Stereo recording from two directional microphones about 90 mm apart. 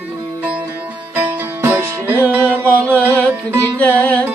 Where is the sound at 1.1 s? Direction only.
20° right (ahead or behind).